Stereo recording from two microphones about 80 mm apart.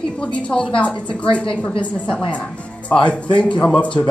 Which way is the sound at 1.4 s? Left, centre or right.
Left.